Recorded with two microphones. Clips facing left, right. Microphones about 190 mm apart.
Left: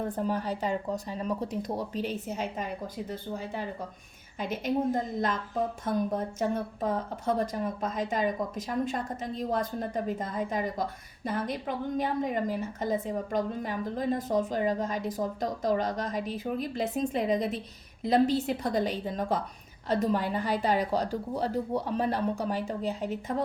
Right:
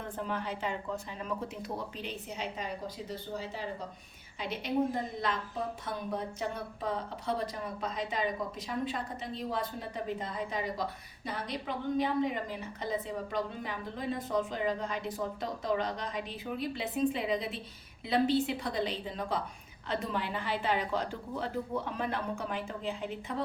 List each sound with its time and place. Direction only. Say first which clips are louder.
0.0 s a woman's voice: left 6 dB; 40° left (ahead or behind)